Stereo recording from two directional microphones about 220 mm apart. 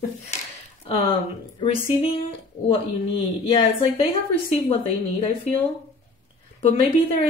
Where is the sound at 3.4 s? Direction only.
25° left (ahead or behind).